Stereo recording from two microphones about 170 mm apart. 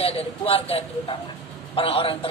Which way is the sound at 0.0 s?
35° left (ahead or behind).